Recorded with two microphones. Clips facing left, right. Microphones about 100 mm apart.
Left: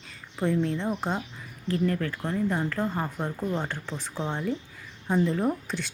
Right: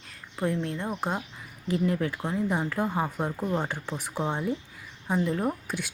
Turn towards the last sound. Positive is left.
turn(degrees=-10)  # may be behind; listen again after turning